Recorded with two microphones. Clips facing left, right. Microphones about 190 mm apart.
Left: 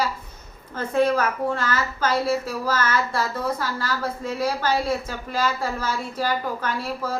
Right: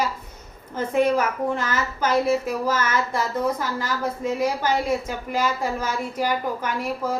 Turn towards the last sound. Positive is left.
turn(degrees=-15)  # may be behind; listen again after turning